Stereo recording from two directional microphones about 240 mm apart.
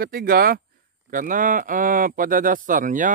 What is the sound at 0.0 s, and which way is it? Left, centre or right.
Speech, right.